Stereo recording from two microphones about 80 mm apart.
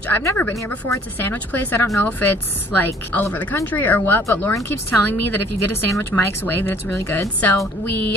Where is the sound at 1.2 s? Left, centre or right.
Left.